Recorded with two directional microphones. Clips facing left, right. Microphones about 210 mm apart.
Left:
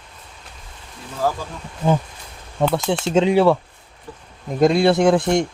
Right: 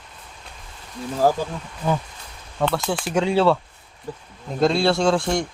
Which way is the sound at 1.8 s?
25° left (ahead or behind).